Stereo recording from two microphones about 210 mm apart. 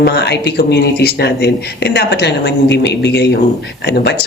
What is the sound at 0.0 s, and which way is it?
Speech, 50° left (ahead or behind).